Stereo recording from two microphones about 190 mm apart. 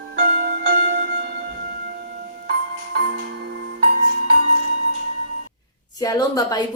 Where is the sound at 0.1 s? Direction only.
55° right (ahead or behind).